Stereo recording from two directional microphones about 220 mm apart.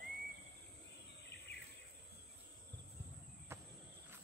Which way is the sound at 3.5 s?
10° right (ahead or behind).